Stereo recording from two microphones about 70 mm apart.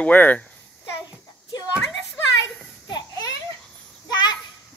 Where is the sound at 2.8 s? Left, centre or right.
Left.